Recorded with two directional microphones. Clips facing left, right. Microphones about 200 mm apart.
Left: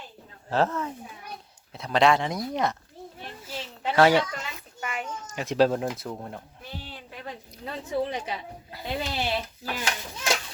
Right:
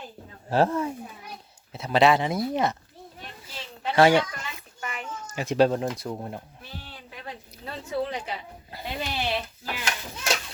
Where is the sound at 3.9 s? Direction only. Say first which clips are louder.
Right 1 dB; centre (ahead or behind).